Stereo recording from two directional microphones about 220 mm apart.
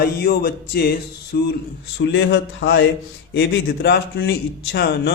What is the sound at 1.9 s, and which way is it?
Speech, 55° left (ahead or behind).